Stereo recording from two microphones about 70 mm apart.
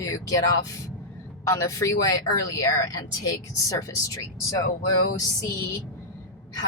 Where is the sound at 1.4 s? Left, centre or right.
Left.